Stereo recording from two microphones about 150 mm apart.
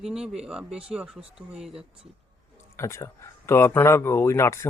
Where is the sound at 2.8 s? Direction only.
20° left (ahead or behind).